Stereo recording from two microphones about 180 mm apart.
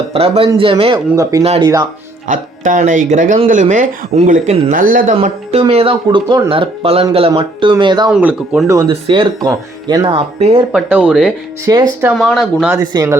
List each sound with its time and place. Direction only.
0.1 s speech: 35° right (ahead or behind)
1.1 s speech: 20° right (ahead or behind)
2.2 s speech: 45° right (ahead or behind)
5.1 s speech: 35° right (ahead or behind)
8.1 s speech: 5° right (ahead or behind)
8.9 s speech: 30° right (ahead or behind)
10.7 s speech: 10° right (ahead or behind)
11.6 s speech: 20° right (ahead or behind)
12.1 s speech: centre (ahead or behind)
12.8 s speech: 20° right (ahead or behind)